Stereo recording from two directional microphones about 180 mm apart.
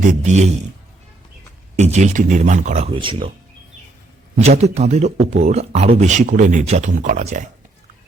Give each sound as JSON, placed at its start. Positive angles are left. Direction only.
{"t": 0.0, "sound": "speech", "side_deg": -40}
{"t": 1.7, "sound": "speech", "side_deg": -40}
{"t": 4.4, "sound": "speech", "side_deg": -35}